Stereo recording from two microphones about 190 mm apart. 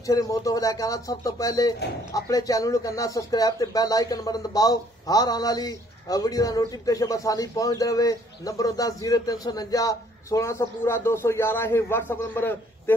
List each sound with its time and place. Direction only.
0.0 s speech: 20° left (ahead or behind)